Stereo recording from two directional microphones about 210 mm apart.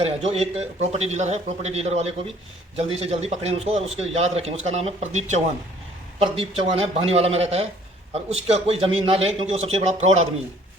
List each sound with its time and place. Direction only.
0.0 s a man's voice: 30° right (ahead or behind)